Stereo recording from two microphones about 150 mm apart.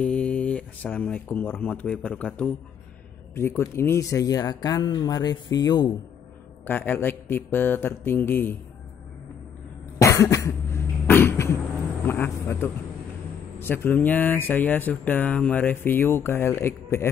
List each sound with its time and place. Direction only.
0.0 s speech: 5° left (ahead or behind); by 5.9 s 25° left (ahead or behind)
6.6 s speech: 15° left (ahead or behind)
9.9 s cough: 20° left (ahead or behind)
12.1 s speech: 15° left (ahead or behind)